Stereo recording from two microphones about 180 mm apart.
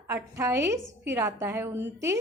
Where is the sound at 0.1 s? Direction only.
15° right (ahead or behind).